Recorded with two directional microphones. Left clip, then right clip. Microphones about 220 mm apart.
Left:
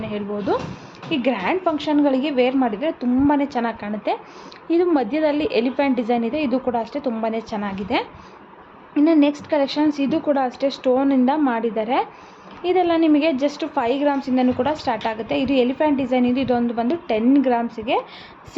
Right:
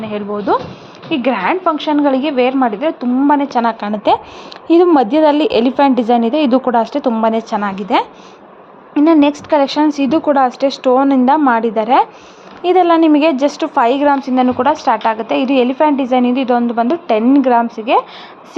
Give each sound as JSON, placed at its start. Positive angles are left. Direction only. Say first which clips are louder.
{"t": 0.0, "sound": "a woman's voice", "louder": "right 6 dB", "side_deg": -5}